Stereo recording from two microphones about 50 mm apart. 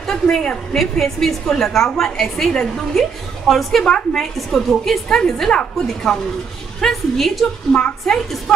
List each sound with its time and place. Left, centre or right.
0.0 s a woman's voice: centre
6.8 s a woman's voice: centre
7.7 s a woman's voice: centre
8.5 s a woman's voice: centre